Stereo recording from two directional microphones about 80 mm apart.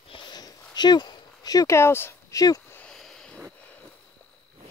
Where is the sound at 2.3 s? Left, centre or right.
Left.